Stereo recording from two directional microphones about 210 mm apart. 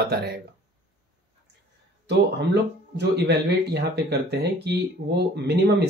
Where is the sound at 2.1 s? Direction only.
50° right (ahead or behind).